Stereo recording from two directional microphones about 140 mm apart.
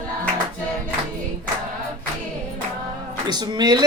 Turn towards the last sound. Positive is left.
turn(degrees=-30)  # may be behind; listen again after turning